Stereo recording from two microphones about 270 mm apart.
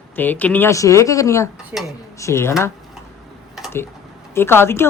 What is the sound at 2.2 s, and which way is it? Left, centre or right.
Speech, centre.